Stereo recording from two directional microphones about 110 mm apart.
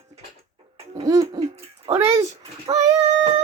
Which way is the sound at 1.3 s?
60° right (ahead or behind).